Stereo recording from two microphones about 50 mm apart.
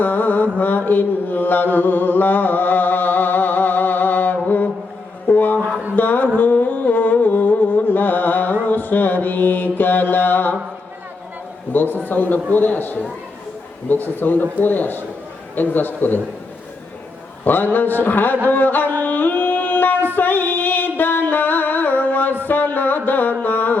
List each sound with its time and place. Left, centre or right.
0.0 s mantra: left
5.3 s a sound: left
6.0 s music: left
8.6 s mantra: left
11.7 s a sound: left
12.0 s a man's voice: left
17.4 s a man's voice: left
19.0 s music: left